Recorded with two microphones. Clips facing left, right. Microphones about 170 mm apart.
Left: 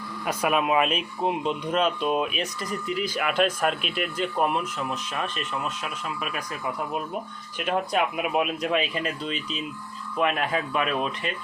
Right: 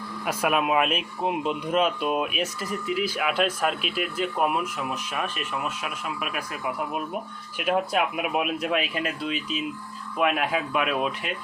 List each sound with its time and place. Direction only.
0.3 s speech: centre (ahead or behind)